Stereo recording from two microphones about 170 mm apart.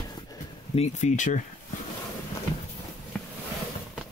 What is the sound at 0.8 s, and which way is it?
Speech, 40° left (ahead or behind).